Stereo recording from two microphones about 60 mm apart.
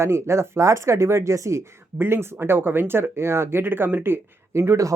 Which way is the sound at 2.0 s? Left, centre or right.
Right.